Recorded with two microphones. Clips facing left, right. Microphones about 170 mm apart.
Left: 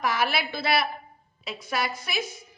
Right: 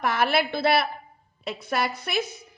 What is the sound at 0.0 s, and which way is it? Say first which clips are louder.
A woman's voice: right 3 dB; 55° right (ahead or behind).